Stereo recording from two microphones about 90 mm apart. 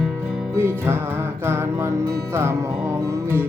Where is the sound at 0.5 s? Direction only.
25° right (ahead or behind).